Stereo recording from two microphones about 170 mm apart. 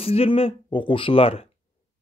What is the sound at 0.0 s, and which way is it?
Speech, 35° left (ahead or behind).